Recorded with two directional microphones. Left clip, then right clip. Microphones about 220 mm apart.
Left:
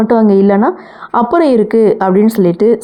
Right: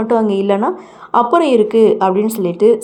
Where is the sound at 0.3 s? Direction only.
10° left (ahead or behind).